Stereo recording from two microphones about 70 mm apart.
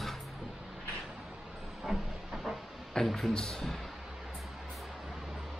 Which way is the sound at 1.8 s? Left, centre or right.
Centre.